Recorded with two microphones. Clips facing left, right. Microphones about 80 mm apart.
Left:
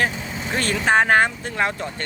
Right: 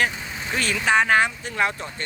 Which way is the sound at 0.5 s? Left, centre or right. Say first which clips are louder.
Left 2 dB; left.